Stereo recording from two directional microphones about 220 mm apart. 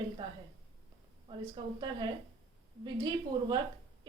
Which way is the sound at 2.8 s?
20° right (ahead or behind).